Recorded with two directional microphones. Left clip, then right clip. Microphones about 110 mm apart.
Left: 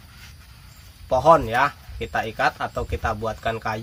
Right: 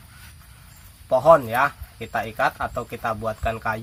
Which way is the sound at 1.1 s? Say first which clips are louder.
Right 1 dB; 20° left (ahead or behind).